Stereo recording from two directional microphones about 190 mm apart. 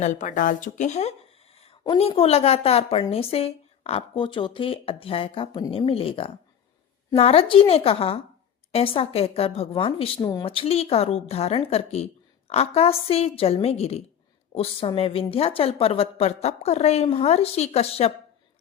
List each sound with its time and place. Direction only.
0.0 s a woman's voice: 40° left (ahead or behind)
5.5 s a woman's voice: 20° left (ahead or behind)
5.7 s a woman's voice: 30° left (ahead or behind)